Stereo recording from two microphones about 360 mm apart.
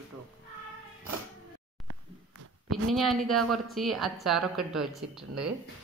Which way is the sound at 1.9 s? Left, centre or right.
Right.